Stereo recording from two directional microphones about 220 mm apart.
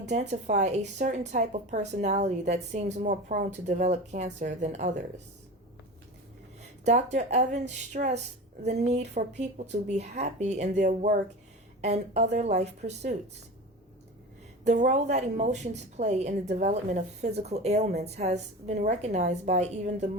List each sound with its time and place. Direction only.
0.1 s a woman's voice: 30° right (ahead or behind)
6.8 s a woman's voice: 30° right (ahead or behind)
14.6 s a woman's voice: 30° right (ahead or behind)